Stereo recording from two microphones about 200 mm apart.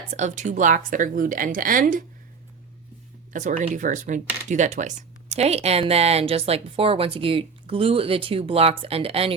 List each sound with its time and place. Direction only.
0.1 s a woman's voice: 35° right (ahead or behind)
3.3 s a woman's voice: 40° right (ahead or behind)